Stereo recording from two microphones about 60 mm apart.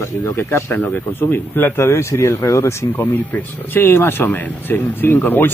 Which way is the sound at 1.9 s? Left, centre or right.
Left.